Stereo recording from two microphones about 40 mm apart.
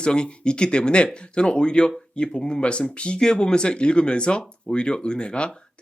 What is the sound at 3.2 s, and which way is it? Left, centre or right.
Speech, centre.